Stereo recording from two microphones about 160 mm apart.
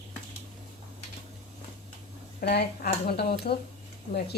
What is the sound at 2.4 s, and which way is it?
A woman's voice, 80° left.